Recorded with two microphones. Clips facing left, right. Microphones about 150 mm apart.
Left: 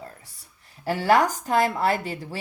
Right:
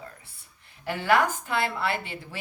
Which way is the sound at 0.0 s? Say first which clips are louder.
Left 3 dB; 40° left (ahead or behind).